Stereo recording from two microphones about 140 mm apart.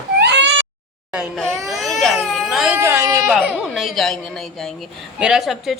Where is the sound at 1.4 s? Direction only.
Centre (ahead or behind).